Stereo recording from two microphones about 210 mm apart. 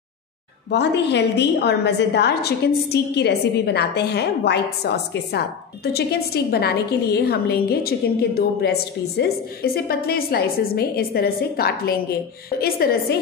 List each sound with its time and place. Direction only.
0.7 s a woman's voice: 55° left (ahead or behind)